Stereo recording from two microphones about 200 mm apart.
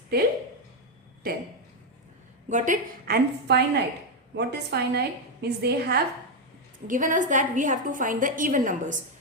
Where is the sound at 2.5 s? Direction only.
40° right (ahead or behind).